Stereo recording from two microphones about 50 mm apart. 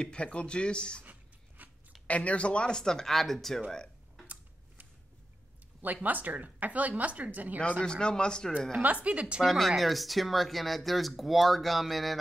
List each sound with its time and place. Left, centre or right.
0.0 s speech: left
1.6 s a sound: right
2.0 s speech: left
2.8 s speech: centre
6.0 s speech: right
7.8 s speech: centre
8.8 s a woman's voice: right
9.4 s speech: centre